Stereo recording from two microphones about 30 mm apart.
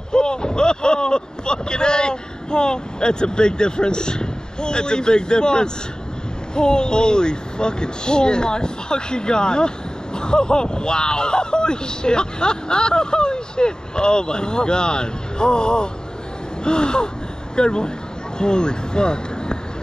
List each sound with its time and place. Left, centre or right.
0.1 s speech: left